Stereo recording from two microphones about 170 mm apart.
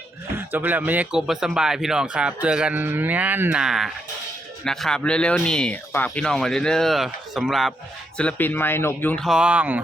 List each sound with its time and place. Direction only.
0.3 s speech: 10° right (ahead or behind)
8.2 s speech: 10° left (ahead or behind); by 9.8 s 10° right (ahead or behind)